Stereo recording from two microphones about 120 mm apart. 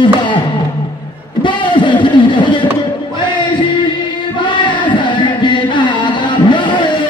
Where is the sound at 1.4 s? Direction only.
40° left (ahead or behind).